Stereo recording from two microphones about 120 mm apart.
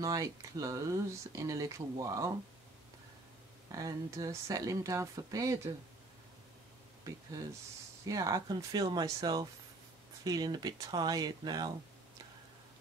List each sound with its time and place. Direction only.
0.0 s speech: 30° right (ahead or behind)
3.6 s speech: 30° right (ahead or behind)
8.1 s speech: 30° right (ahead or behind)